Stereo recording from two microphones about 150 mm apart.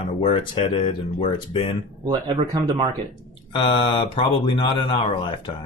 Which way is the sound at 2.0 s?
30° right (ahead or behind).